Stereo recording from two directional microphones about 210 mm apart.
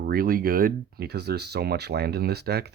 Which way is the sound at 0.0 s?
45° right (ahead or behind).